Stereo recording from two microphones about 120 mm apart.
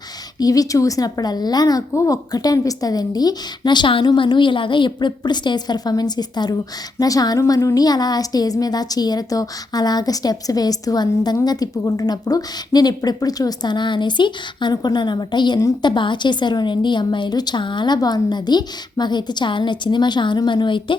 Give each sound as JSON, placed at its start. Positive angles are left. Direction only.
{"t": 0.3, "sound": "a woman's voice", "side_deg": 30}